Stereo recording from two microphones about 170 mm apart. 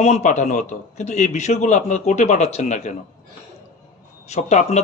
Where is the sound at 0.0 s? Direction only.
40° left (ahead or behind).